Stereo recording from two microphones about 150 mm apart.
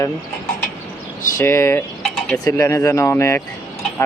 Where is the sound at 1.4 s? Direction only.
20° left (ahead or behind).